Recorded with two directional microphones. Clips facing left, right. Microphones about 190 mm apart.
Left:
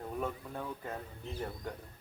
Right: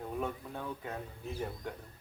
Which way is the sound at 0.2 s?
Centre (ahead or behind).